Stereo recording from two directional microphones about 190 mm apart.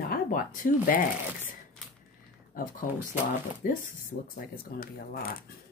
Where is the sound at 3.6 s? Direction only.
45° left (ahead or behind).